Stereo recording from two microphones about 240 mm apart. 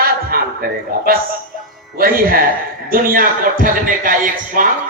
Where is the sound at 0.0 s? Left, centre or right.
Right.